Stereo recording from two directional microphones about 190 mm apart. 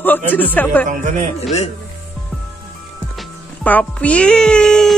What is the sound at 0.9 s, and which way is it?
Speech, 40° right (ahead or behind).